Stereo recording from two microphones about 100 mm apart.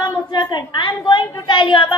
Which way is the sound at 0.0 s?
50° left (ahead or behind).